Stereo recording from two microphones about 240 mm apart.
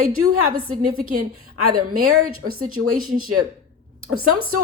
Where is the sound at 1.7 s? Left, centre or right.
Right.